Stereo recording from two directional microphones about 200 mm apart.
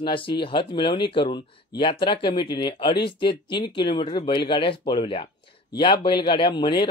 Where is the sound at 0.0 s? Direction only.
25° left (ahead or behind).